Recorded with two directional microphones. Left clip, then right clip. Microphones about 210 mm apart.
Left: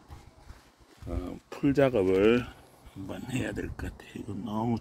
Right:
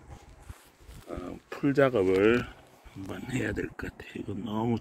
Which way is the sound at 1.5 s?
25° left (ahead or behind).